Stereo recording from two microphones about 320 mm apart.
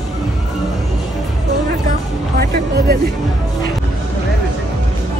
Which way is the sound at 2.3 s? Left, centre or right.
Right.